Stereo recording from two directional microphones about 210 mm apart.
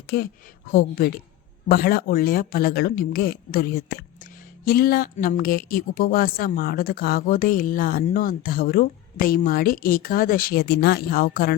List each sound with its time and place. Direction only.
0.7 s speech: 45° left (ahead or behind)